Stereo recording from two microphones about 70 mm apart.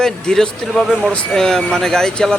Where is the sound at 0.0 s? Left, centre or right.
Centre.